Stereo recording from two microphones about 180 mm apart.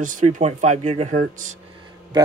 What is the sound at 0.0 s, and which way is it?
Speech, 45° right (ahead or behind).